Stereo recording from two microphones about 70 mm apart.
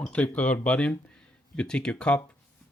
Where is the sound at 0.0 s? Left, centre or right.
Centre.